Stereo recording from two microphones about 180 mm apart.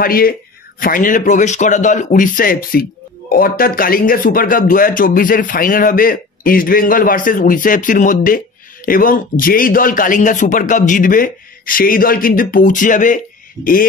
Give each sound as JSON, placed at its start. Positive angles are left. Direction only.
{"t": 0.0, "sound": "a man's voice", "side_deg": 55}